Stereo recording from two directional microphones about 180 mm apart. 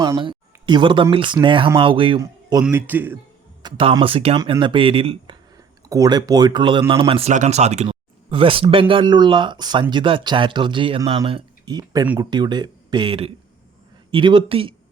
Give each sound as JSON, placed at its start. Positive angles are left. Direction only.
{"t": 0.0, "sound": "a sound", "side_deg": -25}
{"t": 1.1, "sound": "speech", "side_deg": -25}
{"t": 2.2, "sound": "a sound", "side_deg": -20}
{"t": 2.6, "sound": "a man's voice", "side_deg": -10}
{"t": 3.6, "sound": "speech", "side_deg": -25}
{"t": 12.0, "sound": "a man's voice", "side_deg": -10}
{"t": 12.3, "sound": "speech", "side_deg": -25}